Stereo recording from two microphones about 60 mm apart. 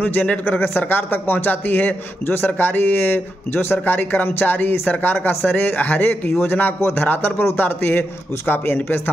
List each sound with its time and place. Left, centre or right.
0.0 s a man's voice: left